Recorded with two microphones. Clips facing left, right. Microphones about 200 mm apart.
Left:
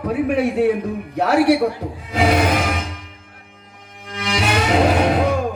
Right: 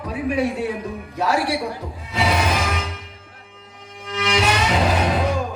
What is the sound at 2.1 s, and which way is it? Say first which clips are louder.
Music: left 5 dB; 50° left (ahead or behind).